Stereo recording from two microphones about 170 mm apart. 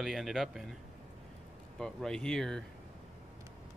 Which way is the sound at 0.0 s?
Centre (ahead or behind).